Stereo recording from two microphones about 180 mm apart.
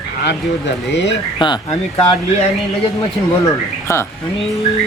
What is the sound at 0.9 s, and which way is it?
Speech, 75° left (ahead or behind).